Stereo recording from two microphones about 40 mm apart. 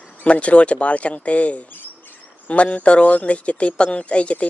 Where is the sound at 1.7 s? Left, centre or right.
Left.